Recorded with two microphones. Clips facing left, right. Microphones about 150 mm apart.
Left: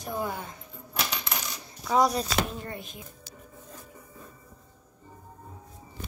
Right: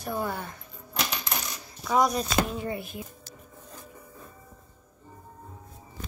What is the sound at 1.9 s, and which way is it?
Speech, 30° left (ahead or behind).